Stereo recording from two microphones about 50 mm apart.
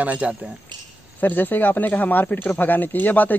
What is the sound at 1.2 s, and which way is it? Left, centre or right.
Speech, left.